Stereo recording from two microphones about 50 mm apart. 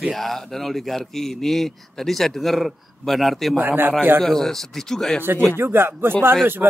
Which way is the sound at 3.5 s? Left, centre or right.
Right.